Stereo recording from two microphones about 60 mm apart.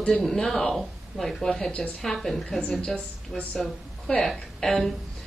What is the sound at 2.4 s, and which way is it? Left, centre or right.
Speech, centre.